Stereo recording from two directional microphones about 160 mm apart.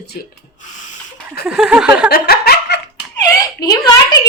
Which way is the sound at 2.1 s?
75° left (ahead or behind).